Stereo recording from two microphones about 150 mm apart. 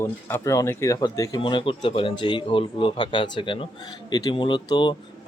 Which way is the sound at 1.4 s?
35° left (ahead or behind).